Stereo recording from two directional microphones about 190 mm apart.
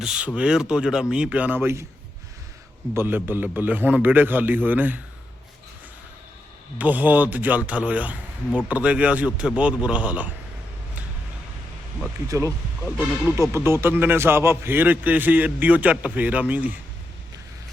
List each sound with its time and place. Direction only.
0.0 s a man's voice: 5° right (ahead or behind)
2.9 s a man's voice: 10° right (ahead or behind)
6.7 s a man's voice: 10° right (ahead or behind)
12.3 s a man's voice: 15° right (ahead or behind)